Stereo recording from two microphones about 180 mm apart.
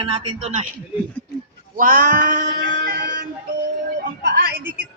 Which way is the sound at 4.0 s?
60° right (ahead or behind).